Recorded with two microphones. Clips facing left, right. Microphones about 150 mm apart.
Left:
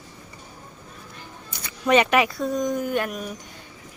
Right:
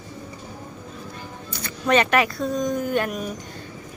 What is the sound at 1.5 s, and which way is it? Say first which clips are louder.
Speech: left 1 dB; 15° left (ahead or behind).